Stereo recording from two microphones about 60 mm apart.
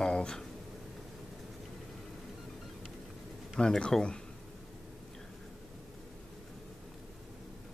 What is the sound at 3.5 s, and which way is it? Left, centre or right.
Speech, centre.